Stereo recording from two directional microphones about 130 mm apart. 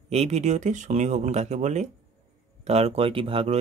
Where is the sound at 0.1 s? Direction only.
55° right (ahead or behind).